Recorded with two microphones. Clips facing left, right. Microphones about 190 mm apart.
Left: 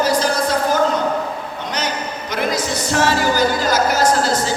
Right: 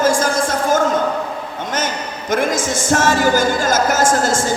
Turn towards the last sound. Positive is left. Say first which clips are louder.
# right 1 dB
turn(degrees=-50)  # may be behind; listen again after turning